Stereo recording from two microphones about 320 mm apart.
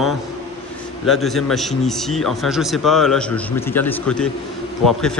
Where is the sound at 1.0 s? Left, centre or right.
Centre.